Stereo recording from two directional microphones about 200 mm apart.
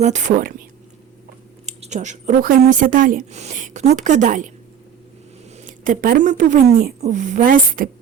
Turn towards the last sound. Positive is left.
turn(degrees=-45)  # may be behind; listen again after turning